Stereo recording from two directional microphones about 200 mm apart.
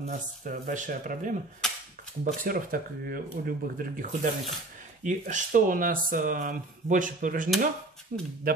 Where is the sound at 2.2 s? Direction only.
45° right (ahead or behind).